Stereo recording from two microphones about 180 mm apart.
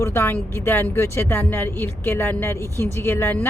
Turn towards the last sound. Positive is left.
turn(degrees=15)  # may be behind; listen again after turning